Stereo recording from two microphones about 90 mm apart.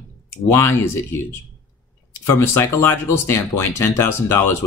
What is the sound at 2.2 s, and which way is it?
Speech, 30° left (ahead or behind).